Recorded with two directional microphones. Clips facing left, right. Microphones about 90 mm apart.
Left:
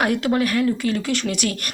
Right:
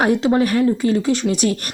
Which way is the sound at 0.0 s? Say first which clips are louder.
Right 4 dB; 30° right (ahead or behind).